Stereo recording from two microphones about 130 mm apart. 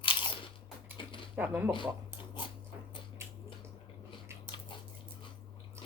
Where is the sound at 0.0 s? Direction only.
40° left (ahead or behind).